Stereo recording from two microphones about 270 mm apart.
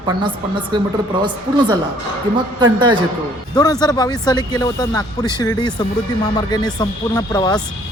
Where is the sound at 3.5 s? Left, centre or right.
Centre.